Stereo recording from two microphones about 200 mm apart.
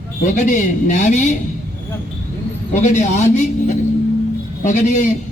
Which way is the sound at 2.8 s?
35° left (ahead or behind).